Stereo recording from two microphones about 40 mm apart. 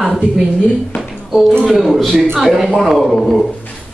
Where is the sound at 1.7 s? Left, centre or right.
Centre.